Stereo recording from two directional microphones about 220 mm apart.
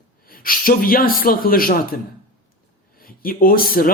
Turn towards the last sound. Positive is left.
turn(degrees=40)  # may be behind; listen again after turning